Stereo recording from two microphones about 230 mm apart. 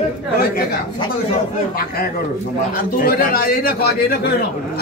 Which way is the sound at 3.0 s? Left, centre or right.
Left.